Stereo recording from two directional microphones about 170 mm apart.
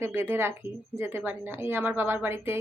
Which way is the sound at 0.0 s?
15° right (ahead or behind).